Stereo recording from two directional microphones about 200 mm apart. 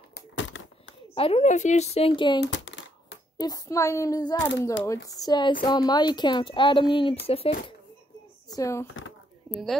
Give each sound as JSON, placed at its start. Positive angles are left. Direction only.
{"t": 0.4, "sound": "typewriter", "side_deg": 75}
{"t": 1.1, "sound": "speech", "side_deg": 30}
{"t": 2.4, "sound": "a sound", "side_deg": 65}
{"t": 3.3, "sound": "speech", "side_deg": 20}
{"t": 8.5, "sound": "speech", "side_deg": 15}
{"t": 9.5, "sound": "a woman's voice", "side_deg": 0}